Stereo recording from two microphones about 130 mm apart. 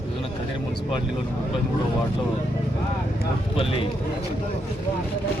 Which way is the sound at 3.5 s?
45° left (ahead or behind).